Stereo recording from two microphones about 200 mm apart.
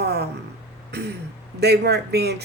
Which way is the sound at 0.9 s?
55° right (ahead or behind).